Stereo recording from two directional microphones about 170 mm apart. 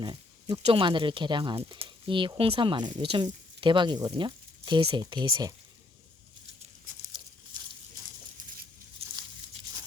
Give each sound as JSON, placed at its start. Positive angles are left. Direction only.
{"t": 0.0, "sound": "speech", "side_deg": -25}